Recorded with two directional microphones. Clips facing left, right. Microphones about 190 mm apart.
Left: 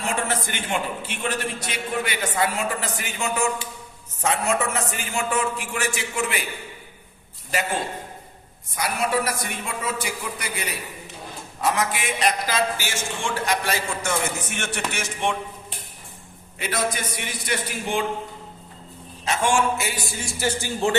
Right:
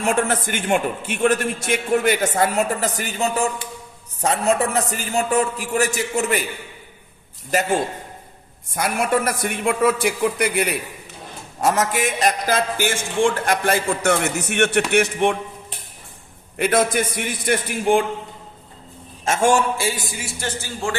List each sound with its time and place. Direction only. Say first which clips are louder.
0.0 s a man's voice: right 6 dB; 50° right (ahead or behind)
7.5 s a man's voice: right 5 dB; 45° right (ahead or behind)
8.7 s a man's voice: right 4 dB; 50° right (ahead or behind)
11.6 s a man's voice: right 4 dB; 45° right (ahead or behind)
16.6 s a man's voice: right 8 dB; 55° right (ahead or behind)
19.2 s a man's voice: right 4 dB; 45° right (ahead or behind); by 20.1 s 25° right (ahead or behind)
20.4 s speech: left 4 dB; 10° left (ahead or behind)